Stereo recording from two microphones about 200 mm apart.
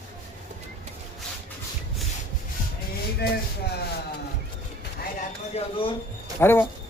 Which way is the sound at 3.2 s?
55° left (ahead or behind).